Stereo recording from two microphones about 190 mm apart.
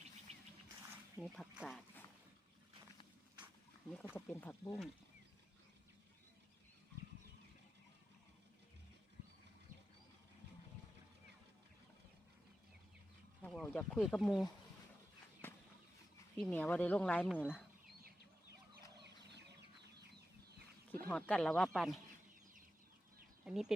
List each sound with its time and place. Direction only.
0.3 s music: 35° right (ahead or behind)
1.2 s speech: centre (ahead or behind)
3.4 s wild animals: 5° right (ahead or behind)
4.1 s speech: 10° left (ahead or behind)
13.4 s speech: 5° left (ahead or behind)
15.4 s a sound: 10° left (ahead or behind)
16.4 s speech: 10° left (ahead or behind)
17.4 s speech: 5° right (ahead or behind)
18.9 s chicken: 65° right (ahead or behind)
20.9 s speech: 5° left (ahead or behind)
23.5 s speech: centre (ahead or behind)